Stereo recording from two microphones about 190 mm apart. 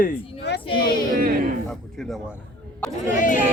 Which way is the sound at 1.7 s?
Centre (ahead or behind).